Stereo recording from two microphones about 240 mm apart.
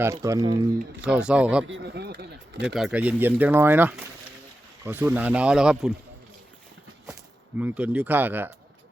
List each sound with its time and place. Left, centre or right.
0.0 s speech: centre
1.0 s speech: centre
1.6 s a sound: right
2.6 s speech: centre
7.6 s speech: centre